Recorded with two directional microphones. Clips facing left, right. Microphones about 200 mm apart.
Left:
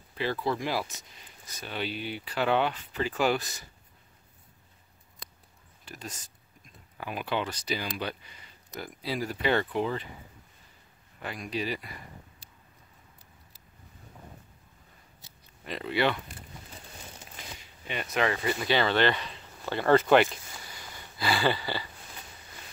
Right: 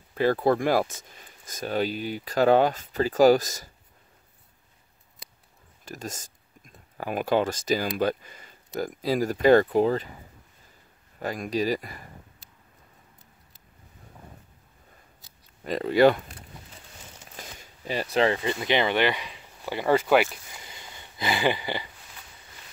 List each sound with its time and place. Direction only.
0.1 s speech: 45° right (ahead or behind)
5.9 s speech: 45° right (ahead or behind)
11.1 s speech: 45° right (ahead or behind)
15.6 s speech: 40° right (ahead or behind)
17.6 s speech: 35° right (ahead or behind); by 20.6 s 10° right (ahead or behind)
20.6 s a sound: 20° right (ahead or behind)